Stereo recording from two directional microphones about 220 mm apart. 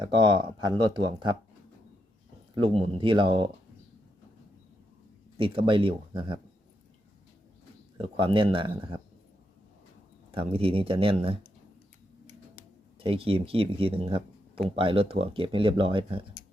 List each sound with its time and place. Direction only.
0.0 s speech: 20° right (ahead or behind)
2.6 s speech: 25° right (ahead or behind)
5.4 s speech: 25° right (ahead or behind)
7.9 s speech: 25° right (ahead or behind)
10.3 s speech: 25° right (ahead or behind)
13.0 s speech: 25° right (ahead or behind)